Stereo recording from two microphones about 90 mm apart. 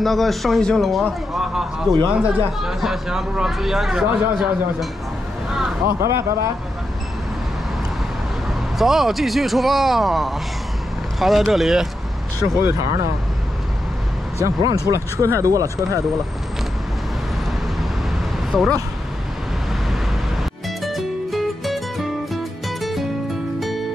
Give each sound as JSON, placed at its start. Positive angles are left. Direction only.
{"t": 0.0, "sound": "speech", "side_deg": 0}
{"t": 5.9, "sound": "speech", "side_deg": -30}
{"t": 8.7, "sound": "speech", "side_deg": -5}
{"t": 12.5, "sound": "speech", "side_deg": -35}
{"t": 14.4, "sound": "speech", "side_deg": -40}
{"t": 18.5, "sound": "speech", "side_deg": 5}
{"t": 20.8, "sound": "music", "side_deg": 0}